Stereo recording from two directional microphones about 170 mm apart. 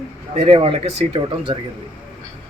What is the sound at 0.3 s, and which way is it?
Speech, 35° right (ahead or behind).